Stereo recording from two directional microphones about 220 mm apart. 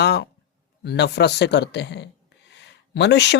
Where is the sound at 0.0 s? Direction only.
50° left (ahead or behind).